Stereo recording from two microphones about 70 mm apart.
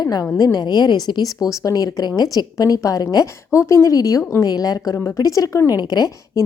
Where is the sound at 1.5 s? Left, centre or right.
Left.